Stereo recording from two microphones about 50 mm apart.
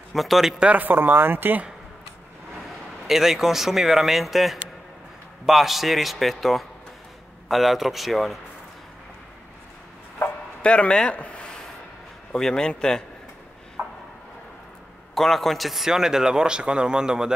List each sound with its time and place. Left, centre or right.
0.1 s speech: centre
0.9 s speech: right
3.1 s speech: centre
10.2 s a sound: left
10.6 s a man's voice: left
13.8 s a sound: right
15.1 s a man's voice: centre